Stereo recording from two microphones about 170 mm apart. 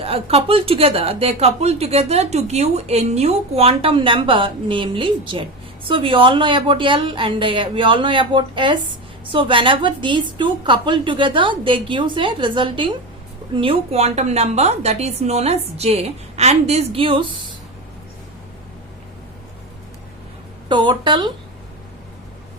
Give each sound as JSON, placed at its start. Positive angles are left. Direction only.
{"t": 0.0, "sound": "a woman's voice", "side_deg": -35}
{"t": 20.7, "sound": "a woman's voice", "side_deg": -30}